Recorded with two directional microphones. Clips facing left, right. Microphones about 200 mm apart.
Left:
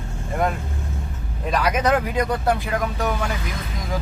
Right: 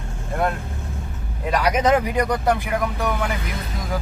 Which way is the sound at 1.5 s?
10° right (ahead or behind).